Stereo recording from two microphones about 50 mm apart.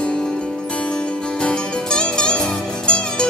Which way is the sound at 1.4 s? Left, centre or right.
Centre.